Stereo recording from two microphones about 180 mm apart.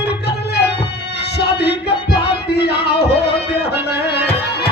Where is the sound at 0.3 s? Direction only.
65° left (ahead or behind).